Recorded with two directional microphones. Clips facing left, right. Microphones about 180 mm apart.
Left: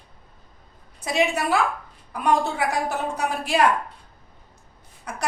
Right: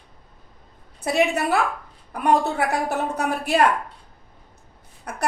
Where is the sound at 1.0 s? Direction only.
60° right (ahead or behind).